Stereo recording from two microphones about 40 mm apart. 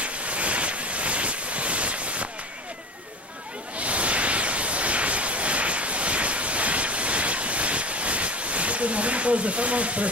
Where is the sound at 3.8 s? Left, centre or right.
Right.